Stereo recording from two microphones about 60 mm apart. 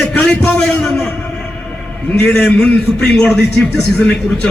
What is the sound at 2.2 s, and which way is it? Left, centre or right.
A man's voice, centre.